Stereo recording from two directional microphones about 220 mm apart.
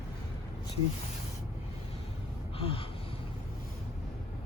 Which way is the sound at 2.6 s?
25° left (ahead or behind).